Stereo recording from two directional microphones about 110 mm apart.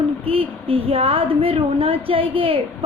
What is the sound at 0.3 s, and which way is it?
A woman's voice, 55° right (ahead or behind).